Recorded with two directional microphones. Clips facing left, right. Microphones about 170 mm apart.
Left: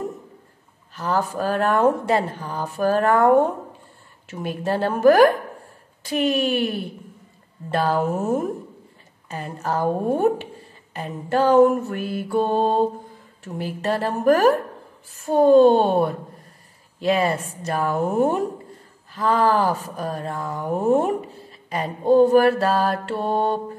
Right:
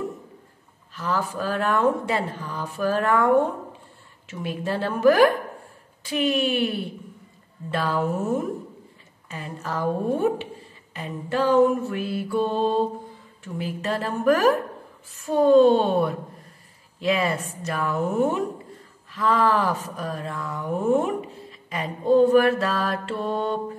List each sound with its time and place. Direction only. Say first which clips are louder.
0.9 s speech: left 3 dB; 45° left (ahead or behind)
4.3 s speech: left 3 dB; 45° left (ahead or behind)
7.7 s speech: left 3 dB; 45° left (ahead or behind)
15.2 s speech: left 2 dB; 50° left (ahead or behind)